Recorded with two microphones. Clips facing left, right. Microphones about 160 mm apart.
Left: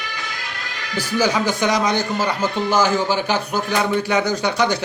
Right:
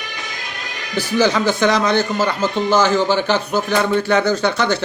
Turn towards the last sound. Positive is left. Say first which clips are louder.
# right 2 dB
turn(degrees=15)  # may be behind; listen again after turning